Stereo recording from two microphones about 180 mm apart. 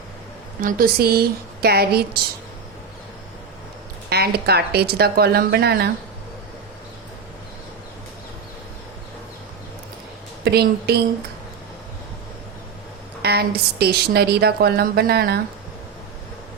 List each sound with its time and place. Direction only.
0.6 s a woman's voice: 60° right (ahead or behind)
4.1 s a woman's voice: 60° right (ahead or behind)
10.4 s a woman's voice: 60° right (ahead or behind)
13.2 s a woman's voice: 60° right (ahead or behind)